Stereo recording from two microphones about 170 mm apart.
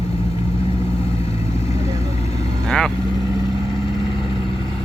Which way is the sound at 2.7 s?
Centre (ahead or behind).